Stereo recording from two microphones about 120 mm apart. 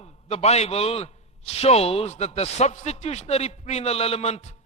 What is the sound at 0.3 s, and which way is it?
A man's voice, 60° left (ahead or behind).